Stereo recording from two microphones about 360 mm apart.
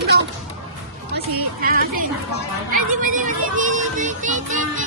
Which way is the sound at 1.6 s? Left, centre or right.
Right.